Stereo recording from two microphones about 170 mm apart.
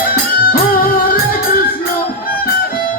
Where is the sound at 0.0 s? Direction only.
60° left (ahead or behind).